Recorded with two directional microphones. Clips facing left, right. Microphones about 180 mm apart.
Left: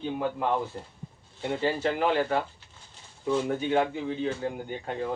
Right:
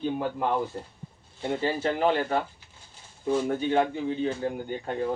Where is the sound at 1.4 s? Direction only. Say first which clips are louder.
Even; 35° right (ahead or behind).